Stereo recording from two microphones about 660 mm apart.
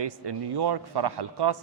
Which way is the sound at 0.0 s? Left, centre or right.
Right.